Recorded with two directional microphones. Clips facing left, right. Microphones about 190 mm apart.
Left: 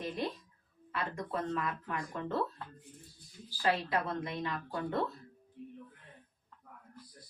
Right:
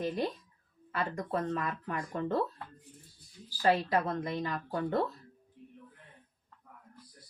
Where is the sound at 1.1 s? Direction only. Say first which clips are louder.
Right 1 dB; 40° right (ahead or behind).